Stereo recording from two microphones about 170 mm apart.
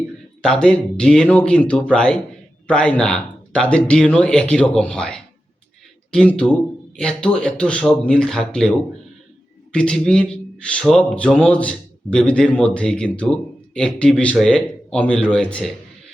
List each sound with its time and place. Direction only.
0.4 s a man's voice: 5° left (ahead or behind)
9.7 s a man's voice: 5° left (ahead or behind)